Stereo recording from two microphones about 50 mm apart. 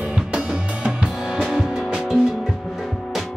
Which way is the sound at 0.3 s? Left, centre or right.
Centre.